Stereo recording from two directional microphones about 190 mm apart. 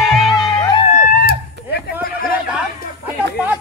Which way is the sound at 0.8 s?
40° left (ahead or behind).